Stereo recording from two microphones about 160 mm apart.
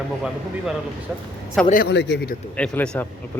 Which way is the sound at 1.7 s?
80° left.